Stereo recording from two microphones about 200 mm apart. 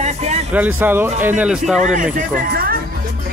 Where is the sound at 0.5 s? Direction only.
10° right (ahead or behind).